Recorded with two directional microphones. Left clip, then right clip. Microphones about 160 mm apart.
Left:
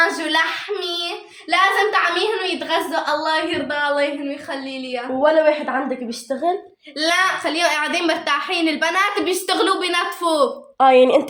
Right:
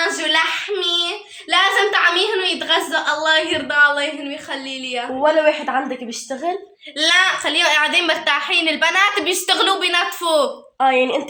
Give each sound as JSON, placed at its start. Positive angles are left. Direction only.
{"t": 0.0, "sound": "a sound", "side_deg": -10}
{"t": 1.0, "sound": "child singing", "side_deg": -5}
{"t": 2.4, "sound": "a woman's voice", "side_deg": -5}
{"t": 5.2, "sound": "speech", "side_deg": 30}
{"t": 7.0, "sound": "a woman's voice", "side_deg": 0}
{"t": 10.8, "sound": "a woman's voice", "side_deg": 90}